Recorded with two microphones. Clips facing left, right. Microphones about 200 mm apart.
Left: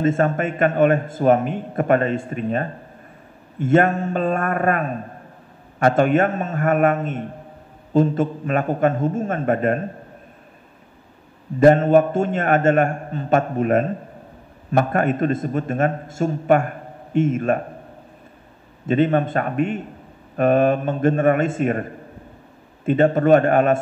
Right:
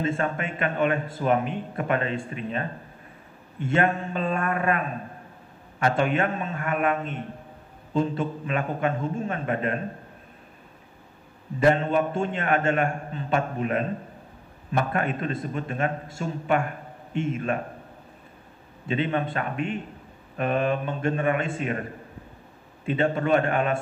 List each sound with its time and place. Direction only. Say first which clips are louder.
0.0 s a man's voice: left 8 dB; 45° left (ahead or behind)
3.6 s a man's voice: left 7 dB; 45° left (ahead or behind)
11.6 s a man's voice: left 8 dB; 45° left (ahead or behind)
18.9 s a man's voice: left 8 dB; 45° left (ahead or behind)
22.8 s a man's voice: left 8 dB; 45° left (ahead or behind)